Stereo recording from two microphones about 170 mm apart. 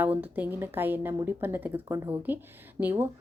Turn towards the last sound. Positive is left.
turn(degrees=-10)  # may be behind; listen again after turning